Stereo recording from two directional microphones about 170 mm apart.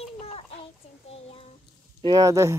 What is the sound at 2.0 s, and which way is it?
Speech, 20° right (ahead or behind).